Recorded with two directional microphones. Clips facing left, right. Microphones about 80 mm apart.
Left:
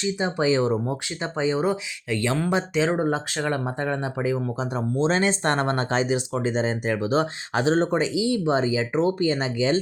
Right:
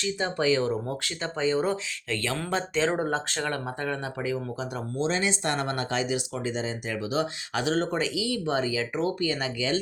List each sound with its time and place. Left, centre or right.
0.0 s speech: centre